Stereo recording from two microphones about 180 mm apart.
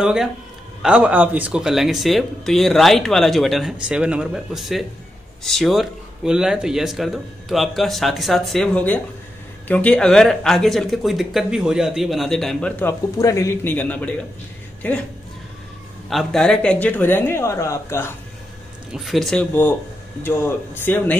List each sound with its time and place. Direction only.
0.0 s speech: 5° right (ahead or behind)
16.1 s speech: centre (ahead or behind)
18.9 s speech: centre (ahead or behind)
20.2 s speech: 10° left (ahead or behind)